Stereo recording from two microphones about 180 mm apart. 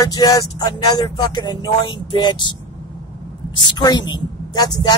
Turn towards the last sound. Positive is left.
turn(degrees=25)  # may be behind; listen again after turning